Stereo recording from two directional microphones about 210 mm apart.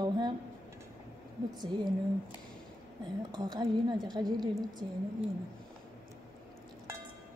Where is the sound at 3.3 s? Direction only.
20° right (ahead or behind).